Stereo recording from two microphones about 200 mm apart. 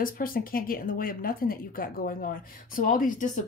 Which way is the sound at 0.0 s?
45° left (ahead or behind).